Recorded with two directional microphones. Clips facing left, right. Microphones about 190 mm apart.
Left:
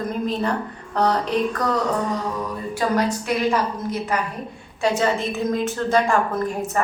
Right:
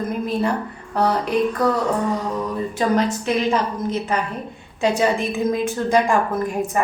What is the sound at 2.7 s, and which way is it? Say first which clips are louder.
A woman's voice: right 1 dB; 25° right (ahead or behind).